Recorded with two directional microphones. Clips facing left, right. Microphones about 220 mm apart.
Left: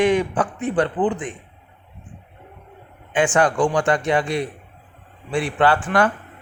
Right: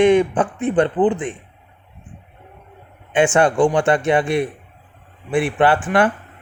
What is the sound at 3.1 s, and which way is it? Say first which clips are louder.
Speech: right 3 dB; 25° right (ahead or behind).